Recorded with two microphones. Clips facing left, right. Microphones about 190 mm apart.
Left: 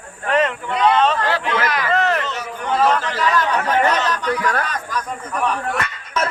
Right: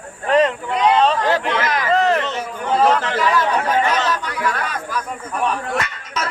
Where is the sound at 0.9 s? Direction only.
35° right (ahead or behind).